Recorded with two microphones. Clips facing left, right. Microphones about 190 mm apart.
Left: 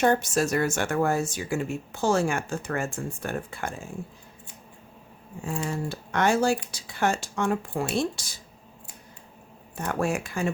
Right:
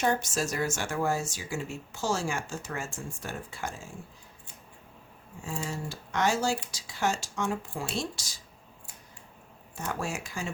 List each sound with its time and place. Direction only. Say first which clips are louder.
0.0 s speech: left 6 dB; 60° left (ahead or behind)
5.4 s speech: left 5 dB; 55° left (ahead or behind)
9.7 s speech: left 7 dB; 55° left (ahead or behind)